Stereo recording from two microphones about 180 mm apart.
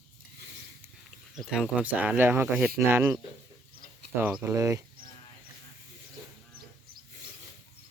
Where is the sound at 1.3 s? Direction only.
Centre (ahead or behind).